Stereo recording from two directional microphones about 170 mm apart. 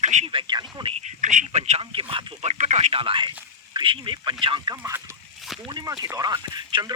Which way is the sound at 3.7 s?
30° right (ahead or behind).